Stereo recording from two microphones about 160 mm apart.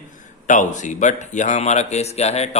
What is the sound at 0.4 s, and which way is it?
Speech, 50° left (ahead or behind).